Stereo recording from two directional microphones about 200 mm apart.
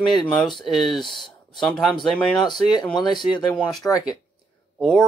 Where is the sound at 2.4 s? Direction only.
20° left (ahead or behind).